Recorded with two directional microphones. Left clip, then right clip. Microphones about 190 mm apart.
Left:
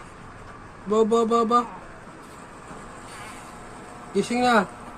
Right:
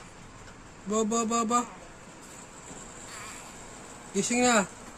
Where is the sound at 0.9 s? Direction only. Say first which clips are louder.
Left 8 dB; 55° right (ahead or behind).